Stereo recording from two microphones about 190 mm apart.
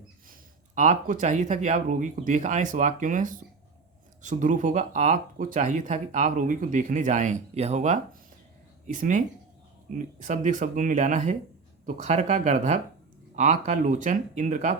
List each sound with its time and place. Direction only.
0.8 s speech: 40° right (ahead or behind)